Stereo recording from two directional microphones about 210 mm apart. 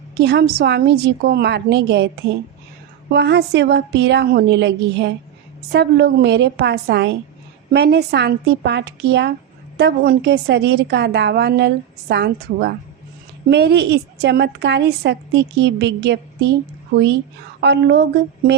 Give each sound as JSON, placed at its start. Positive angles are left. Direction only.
{"t": 0.1, "sound": "a woman's voice", "side_deg": -55}
{"t": 3.1, "sound": "a woman's voice", "side_deg": -55}